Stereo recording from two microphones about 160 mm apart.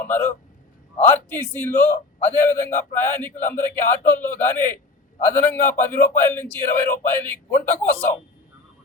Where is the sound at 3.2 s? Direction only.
10° left (ahead or behind).